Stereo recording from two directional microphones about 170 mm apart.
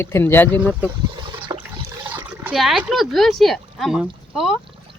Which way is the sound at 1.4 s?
30° right (ahead or behind).